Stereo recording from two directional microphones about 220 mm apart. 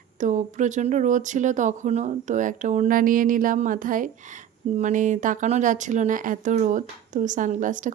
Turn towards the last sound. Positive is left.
turn(degrees=-35)  # may be behind; listen again after turning